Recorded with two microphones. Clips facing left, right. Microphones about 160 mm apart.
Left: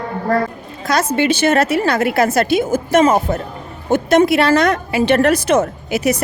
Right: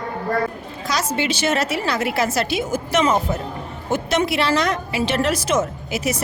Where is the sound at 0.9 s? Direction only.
55° left (ahead or behind).